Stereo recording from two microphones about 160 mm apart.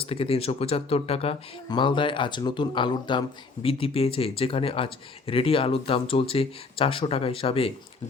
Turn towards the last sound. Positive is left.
turn(degrees=35)  # may be behind; listen again after turning